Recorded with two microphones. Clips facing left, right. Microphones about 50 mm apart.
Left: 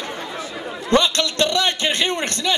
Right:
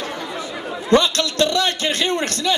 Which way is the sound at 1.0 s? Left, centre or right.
Left.